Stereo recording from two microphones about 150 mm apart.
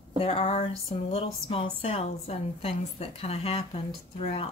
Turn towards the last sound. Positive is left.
turn(degrees=40)  # may be behind; listen again after turning